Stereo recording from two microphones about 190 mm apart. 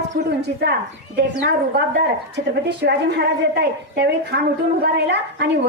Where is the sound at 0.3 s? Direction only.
60° right (ahead or behind).